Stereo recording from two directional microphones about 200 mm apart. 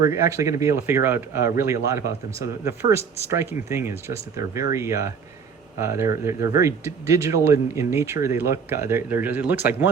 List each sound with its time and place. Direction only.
0.1 s speech: 15° right (ahead or behind)